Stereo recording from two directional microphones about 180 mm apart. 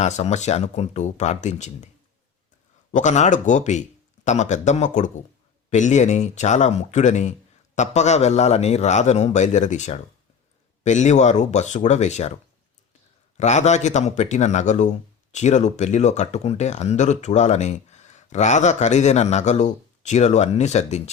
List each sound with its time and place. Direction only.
0.0 s speech: 40° left (ahead or behind)
2.9 s speech: 40° left (ahead or behind)